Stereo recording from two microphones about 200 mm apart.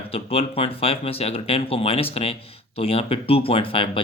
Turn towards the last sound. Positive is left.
turn(degrees=25)  # may be behind; listen again after turning